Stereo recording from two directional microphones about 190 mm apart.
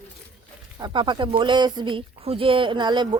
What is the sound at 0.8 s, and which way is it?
Speech, 25° right (ahead or behind).